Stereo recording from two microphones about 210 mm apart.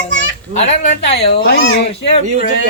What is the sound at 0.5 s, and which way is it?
Speech, 35° left (ahead or behind).